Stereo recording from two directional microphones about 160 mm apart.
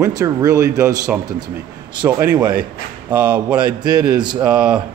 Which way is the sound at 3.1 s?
10° right (ahead or behind).